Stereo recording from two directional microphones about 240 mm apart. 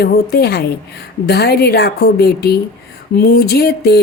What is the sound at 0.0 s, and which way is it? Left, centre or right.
Speech, left.